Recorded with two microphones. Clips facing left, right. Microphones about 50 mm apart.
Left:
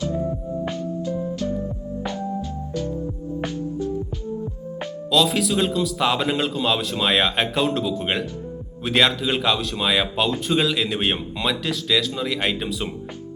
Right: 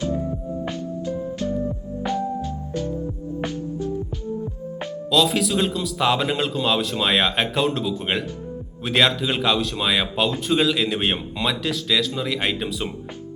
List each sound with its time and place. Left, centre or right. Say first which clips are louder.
1.0 s music: right 1 dB; right
5.1 s speech: even; centre